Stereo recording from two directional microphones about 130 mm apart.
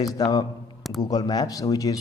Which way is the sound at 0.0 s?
30° left (ahead or behind).